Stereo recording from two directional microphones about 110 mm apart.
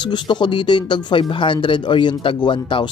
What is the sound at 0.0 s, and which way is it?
Speech, 45° left (ahead or behind).